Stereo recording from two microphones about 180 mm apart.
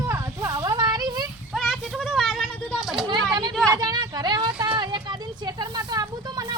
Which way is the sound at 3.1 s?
25° right (ahead or behind).